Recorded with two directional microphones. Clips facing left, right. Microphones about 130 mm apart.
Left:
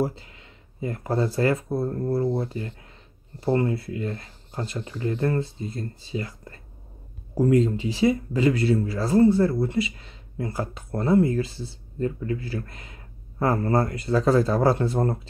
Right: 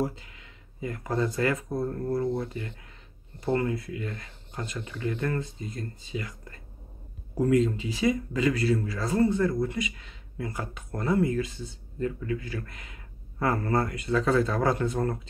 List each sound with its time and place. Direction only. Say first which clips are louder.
0.0 s speech: left 4 dB; 30° left (ahead or behind)